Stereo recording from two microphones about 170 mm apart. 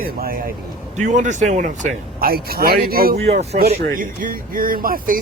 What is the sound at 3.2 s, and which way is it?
Speech, 40° right (ahead or behind).